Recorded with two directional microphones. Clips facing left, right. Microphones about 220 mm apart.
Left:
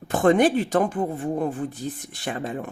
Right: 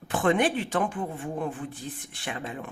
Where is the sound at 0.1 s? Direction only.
40° left (ahead or behind).